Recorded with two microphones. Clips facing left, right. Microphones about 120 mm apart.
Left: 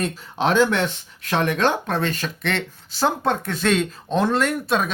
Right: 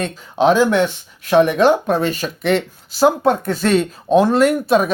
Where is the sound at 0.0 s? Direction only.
Centre (ahead or behind).